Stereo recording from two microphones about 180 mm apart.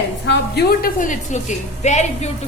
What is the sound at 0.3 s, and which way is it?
A woman's voice, 60° left (ahead or behind).